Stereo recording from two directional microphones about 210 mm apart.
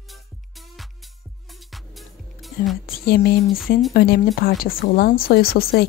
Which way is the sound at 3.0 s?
50° left (ahead or behind).